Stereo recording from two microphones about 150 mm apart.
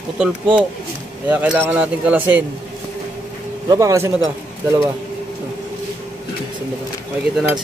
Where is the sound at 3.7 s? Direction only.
20° right (ahead or behind).